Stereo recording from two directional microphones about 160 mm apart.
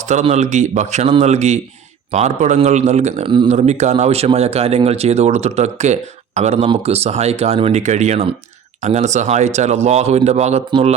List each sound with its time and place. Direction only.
0.1 s speech: 45° right (ahead or behind)
3.2 s speech: 30° right (ahead or behind)
3.5 s speech: 45° right (ahead or behind)